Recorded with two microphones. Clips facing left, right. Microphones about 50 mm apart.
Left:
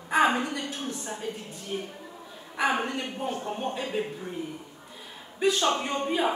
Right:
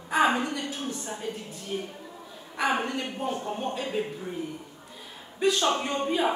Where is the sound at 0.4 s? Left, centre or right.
Centre.